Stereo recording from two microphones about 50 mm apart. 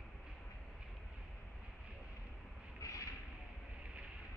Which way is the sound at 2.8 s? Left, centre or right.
Left.